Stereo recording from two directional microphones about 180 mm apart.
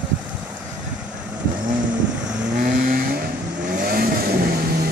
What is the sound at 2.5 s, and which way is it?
Vehicle, 55° right (ahead or behind).